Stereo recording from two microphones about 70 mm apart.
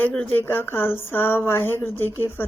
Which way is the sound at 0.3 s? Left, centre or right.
Left.